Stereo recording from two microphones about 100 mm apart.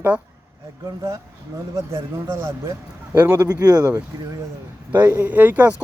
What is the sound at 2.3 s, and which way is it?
Speech, 25° right (ahead or behind).